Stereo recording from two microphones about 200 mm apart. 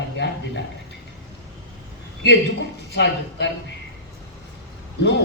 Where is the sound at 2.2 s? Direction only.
60° left (ahead or behind).